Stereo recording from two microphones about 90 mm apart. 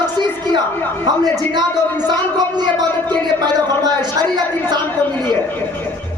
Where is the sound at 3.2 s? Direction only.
50° right (ahead or behind).